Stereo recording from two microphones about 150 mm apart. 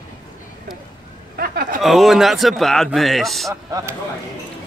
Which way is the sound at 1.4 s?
75° right (ahead or behind).